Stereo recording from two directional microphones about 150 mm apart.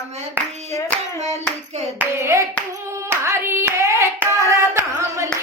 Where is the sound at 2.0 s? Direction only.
20° right (ahead or behind).